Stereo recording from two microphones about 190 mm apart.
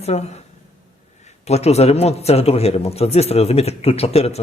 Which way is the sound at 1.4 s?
35° left (ahead or behind).